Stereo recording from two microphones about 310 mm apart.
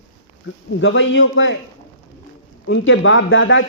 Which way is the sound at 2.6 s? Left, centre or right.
Left.